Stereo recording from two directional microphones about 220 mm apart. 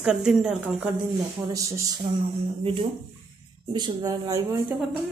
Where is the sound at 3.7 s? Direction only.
20° right (ahead or behind).